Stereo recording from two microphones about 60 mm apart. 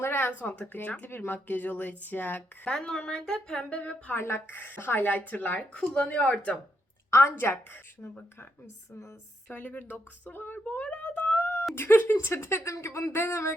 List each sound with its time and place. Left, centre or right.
0.0 s a sound: left
0.6 s speech: left
2.6 s a woman's voice: centre
4.1 s speech: left
7.1 s a woman's voice: left
9.5 s speech: left
11.3 s wail: left
11.7 s speech: left
12.1 s a woman's voice: left